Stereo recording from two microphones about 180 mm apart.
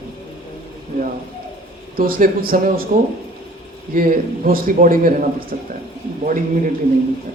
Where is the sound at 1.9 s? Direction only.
55° right (ahead or behind).